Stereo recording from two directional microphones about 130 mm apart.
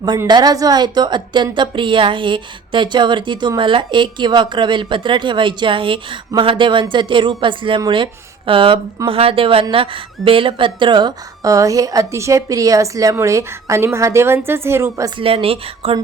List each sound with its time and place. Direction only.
0.3 s a woman's voice: 30° right (ahead or behind)
15.2 s speech: 45° right (ahead or behind)